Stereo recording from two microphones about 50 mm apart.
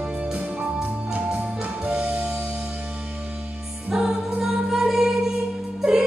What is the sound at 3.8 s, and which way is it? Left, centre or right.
Music, centre.